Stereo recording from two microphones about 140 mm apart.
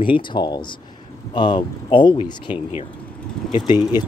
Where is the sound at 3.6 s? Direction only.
30° left (ahead or behind).